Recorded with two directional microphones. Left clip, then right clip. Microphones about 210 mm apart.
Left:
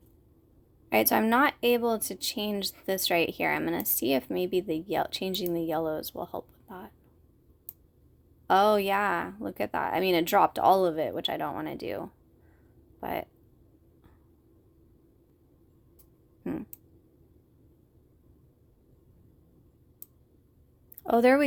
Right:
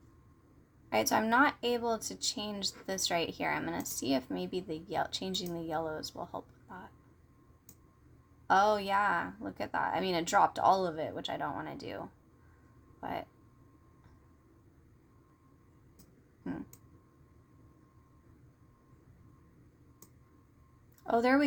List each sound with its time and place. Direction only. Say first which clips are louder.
0.9 s speech: left 5 dB; 55° left (ahead or behind)
8.4 s speech: left 5 dB; 55° left (ahead or behind)
16.4 s a sound: left 6 dB; 50° left (ahead or behind)
21.0 s a woman's voice: left 6 dB; 55° left (ahead or behind)